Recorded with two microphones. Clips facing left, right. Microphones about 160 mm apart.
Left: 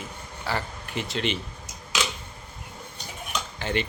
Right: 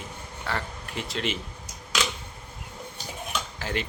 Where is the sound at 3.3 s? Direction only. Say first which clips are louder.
Left 3 dB; 5° right (ahead or behind).